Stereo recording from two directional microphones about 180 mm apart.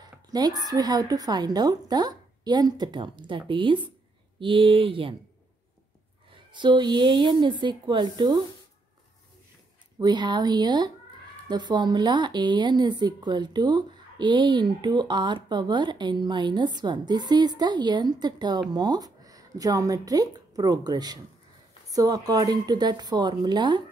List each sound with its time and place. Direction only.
0.0 s a woman's voice: 20° right (ahead or behind)
6.5 s a woman's voice: 25° right (ahead or behind)
9.9 s a woman's voice: 25° right (ahead or behind)